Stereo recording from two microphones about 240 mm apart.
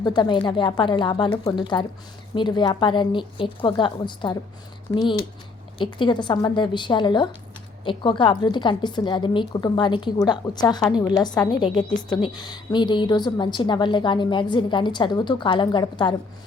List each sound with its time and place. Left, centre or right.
0.0 s a woman's voice: centre